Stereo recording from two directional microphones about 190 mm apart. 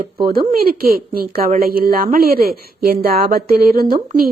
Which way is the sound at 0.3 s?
50° right (ahead or behind).